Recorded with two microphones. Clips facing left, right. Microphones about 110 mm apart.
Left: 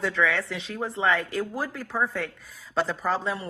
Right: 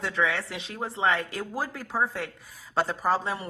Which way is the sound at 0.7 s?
30° right (ahead or behind).